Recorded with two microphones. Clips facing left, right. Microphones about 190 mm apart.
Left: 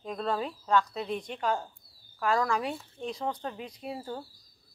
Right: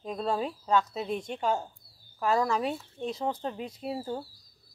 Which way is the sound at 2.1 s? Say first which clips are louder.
Right 1 dB; 20° right (ahead or behind).